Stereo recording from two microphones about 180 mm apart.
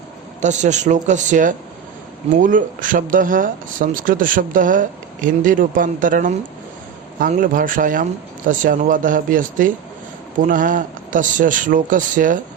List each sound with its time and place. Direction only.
0.4 s speech: 40° right (ahead or behind)